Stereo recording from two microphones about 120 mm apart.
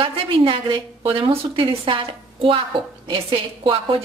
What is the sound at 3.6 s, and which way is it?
Speech, 50° right (ahead or behind).